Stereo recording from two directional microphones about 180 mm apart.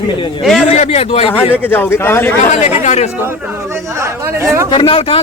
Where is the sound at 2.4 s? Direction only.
40° left (ahead or behind).